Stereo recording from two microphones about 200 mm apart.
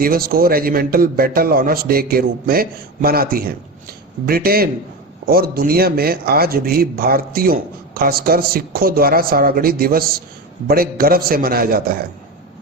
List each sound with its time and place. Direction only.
0.0 s speech: 45° right (ahead or behind)